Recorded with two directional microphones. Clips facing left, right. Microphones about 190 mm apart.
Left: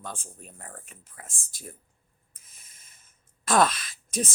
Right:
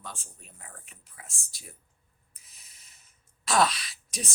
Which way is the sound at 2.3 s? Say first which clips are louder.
Left 1 dB; 50° left (ahead or behind).